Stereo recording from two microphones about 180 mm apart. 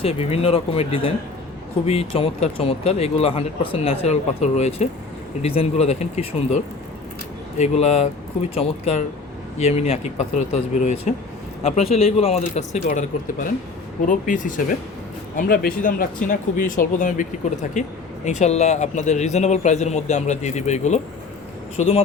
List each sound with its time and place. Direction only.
0.0 s speech: 35° left (ahead or behind)
7.6 s speech: 35° left (ahead or behind)